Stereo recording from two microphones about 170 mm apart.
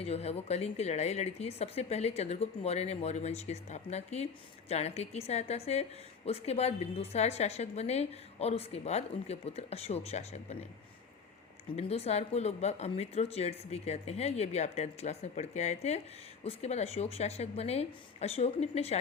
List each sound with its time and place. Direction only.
0.0 s a woman's voice: 40° left (ahead or behind)
11.8 s a woman's voice: 40° left (ahead or behind)